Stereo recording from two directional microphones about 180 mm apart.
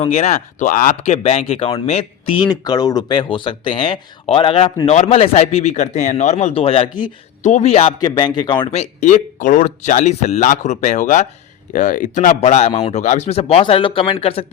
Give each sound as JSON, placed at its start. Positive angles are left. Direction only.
{"t": 0.0, "sound": "speech", "side_deg": 35}
{"t": 2.4, "sound": "speech", "side_deg": 20}
{"t": 7.9, "sound": "speech", "side_deg": 25}